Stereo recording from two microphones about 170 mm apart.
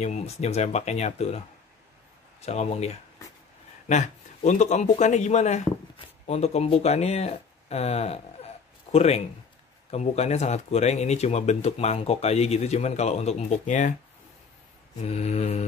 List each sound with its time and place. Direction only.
0.0 s speech: 40° left (ahead or behind)
2.4 s speech: 40° left (ahead or behind)
15.0 s speech: 40° left (ahead or behind)